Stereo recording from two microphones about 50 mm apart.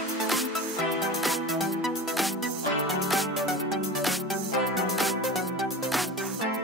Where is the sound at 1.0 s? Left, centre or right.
Centre.